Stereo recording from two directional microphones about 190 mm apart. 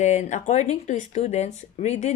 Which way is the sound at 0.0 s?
40° left (ahead or behind).